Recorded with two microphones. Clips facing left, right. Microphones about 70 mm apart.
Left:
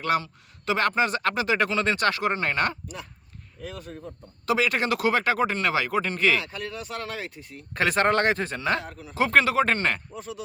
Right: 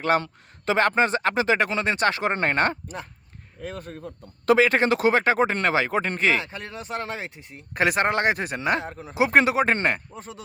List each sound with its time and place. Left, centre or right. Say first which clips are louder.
0.1 s speech: right 3 dB; right
2.3 s speech: right 3 dB; right
9.1 s speech: right 1 dB; centre; by 10.4 s right